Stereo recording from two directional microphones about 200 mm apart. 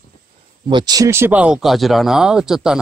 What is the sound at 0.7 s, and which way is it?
Speech, 20° right (ahead or behind).